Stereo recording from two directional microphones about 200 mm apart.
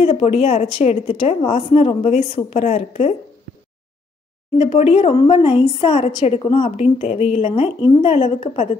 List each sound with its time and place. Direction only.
0.0 s a woman's voice: 30° left (ahead or behind)
4.6 s a woman's voice: 30° left (ahead or behind)